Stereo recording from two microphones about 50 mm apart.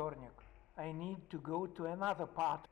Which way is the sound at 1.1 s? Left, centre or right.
Left.